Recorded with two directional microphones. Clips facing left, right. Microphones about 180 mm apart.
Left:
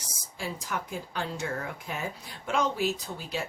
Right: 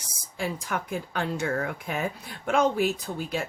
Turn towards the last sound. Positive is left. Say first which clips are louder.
# right 4 dB
turn(degrees=-50)  # may be behind; listen again after turning